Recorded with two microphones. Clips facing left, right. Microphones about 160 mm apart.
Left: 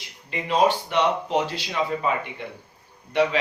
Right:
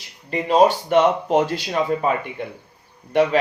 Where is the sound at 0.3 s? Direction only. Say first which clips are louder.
Right 5 dB; 40° right (ahead or behind).